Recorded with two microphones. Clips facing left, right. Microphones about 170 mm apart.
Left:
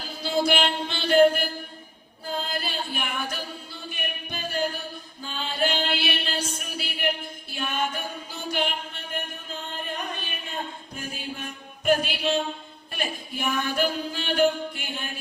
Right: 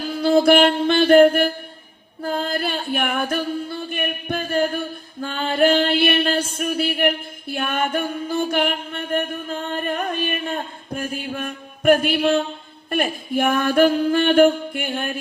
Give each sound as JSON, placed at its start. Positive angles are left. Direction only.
{"t": 0.2, "sound": "music", "side_deg": -55}
{"t": 2.2, "sound": "singing", "side_deg": -55}
{"t": 5.2, "sound": "a sound", "side_deg": -60}
{"t": 12.9, "sound": "singing", "side_deg": -55}